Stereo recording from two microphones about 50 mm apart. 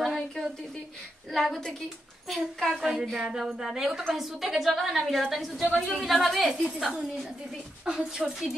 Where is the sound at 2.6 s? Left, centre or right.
Centre.